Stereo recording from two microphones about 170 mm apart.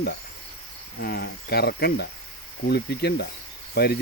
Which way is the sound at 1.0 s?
65° left (ahead or behind).